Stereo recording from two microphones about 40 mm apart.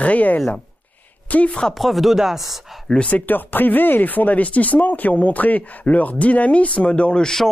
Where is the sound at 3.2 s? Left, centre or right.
Left.